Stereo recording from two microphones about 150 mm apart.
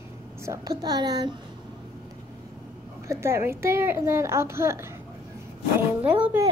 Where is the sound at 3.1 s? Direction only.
15° right (ahead or behind).